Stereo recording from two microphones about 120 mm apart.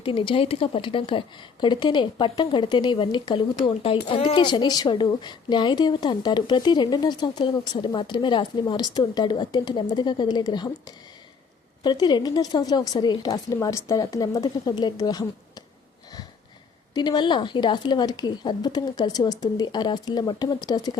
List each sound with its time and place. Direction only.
0.0 s speech: 45° left (ahead or behind)
11.8 s speech: 35° left (ahead or behind)
16.9 s speech: 35° left (ahead or behind)